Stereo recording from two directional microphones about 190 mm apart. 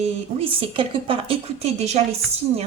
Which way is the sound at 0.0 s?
30° right (ahead or behind).